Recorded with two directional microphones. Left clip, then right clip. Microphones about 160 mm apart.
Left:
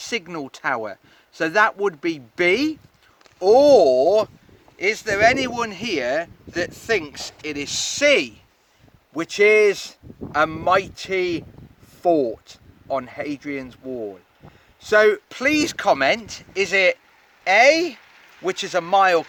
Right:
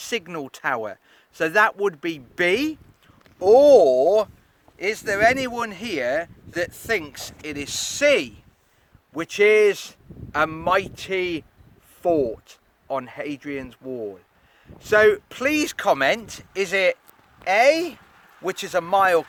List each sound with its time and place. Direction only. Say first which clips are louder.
0.0 s speech: left 1 dB; 30° right (ahead or behind); by 19.2 s 10° right (ahead or behind)